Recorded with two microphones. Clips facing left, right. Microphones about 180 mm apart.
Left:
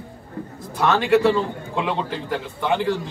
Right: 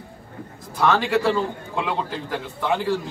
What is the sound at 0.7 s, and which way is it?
A man's voice, centre (ahead or behind).